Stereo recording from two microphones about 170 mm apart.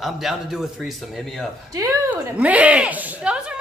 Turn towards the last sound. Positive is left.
turn(degrees=-5)  # may be behind; listen again after turning